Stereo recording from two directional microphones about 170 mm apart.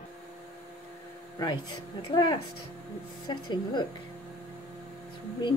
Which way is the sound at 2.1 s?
25° left (ahead or behind).